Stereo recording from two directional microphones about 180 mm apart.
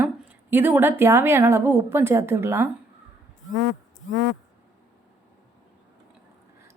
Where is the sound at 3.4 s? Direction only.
90° left.